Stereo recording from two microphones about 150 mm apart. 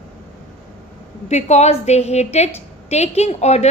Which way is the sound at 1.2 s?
50° left (ahead or behind).